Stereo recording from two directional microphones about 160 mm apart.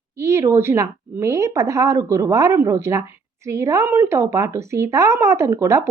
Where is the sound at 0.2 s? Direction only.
15° right (ahead or behind).